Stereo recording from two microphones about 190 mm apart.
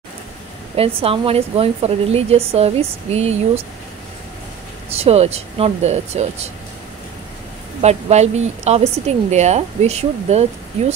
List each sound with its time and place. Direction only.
0.7 s a woman's voice: 30° right (ahead or behind)
4.9 s a woman's voice: 30° right (ahead or behind)
7.8 s a woman's voice: 35° right (ahead or behind)